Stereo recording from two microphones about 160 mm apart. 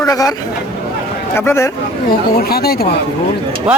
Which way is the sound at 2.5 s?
75° left (ahead or behind).